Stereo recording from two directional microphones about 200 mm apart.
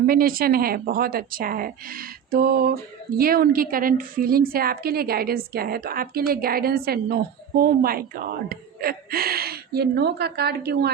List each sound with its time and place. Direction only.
0.0 s a woman's voice: 45° right (ahead or behind)